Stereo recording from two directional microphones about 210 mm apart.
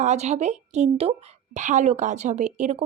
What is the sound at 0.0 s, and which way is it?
Speech, 35° right (ahead or behind).